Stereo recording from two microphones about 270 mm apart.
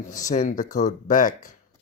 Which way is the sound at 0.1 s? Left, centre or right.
Left.